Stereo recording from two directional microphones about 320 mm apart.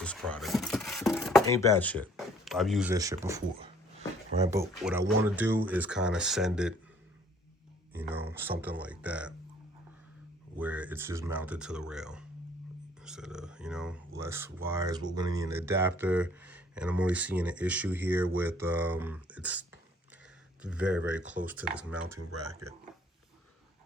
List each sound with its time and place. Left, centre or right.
0.0 s a sound: centre
4.4 s speech: centre
7.9 s speech: centre
10.6 s speech: centre
22.2 s speech: right